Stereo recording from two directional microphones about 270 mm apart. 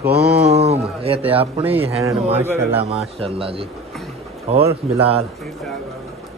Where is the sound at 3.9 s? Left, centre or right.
Centre.